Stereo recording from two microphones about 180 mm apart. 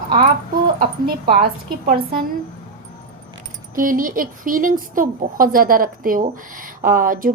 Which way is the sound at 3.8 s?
50° right (ahead or behind).